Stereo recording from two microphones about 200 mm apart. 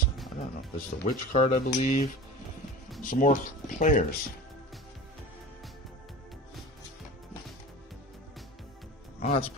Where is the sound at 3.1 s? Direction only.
40° left (ahead or behind).